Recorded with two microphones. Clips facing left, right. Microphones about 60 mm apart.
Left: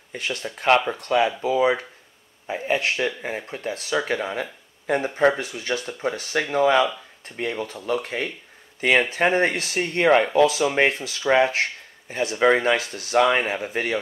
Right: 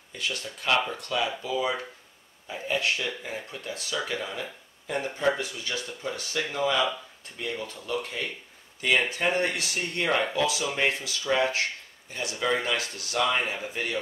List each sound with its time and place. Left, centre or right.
0.1 s speech: left
13.2 s speech: left
13.6 s speech: left